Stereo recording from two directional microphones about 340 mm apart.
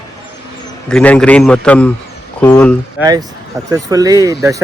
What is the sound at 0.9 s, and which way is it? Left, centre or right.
Speech, centre.